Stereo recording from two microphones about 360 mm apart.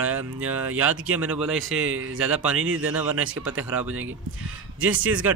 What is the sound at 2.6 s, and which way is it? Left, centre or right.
Speech, right.